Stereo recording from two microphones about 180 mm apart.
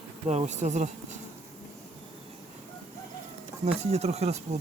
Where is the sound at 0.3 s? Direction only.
40° right (ahead or behind).